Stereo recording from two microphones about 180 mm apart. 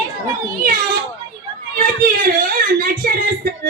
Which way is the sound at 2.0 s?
55° right (ahead or behind).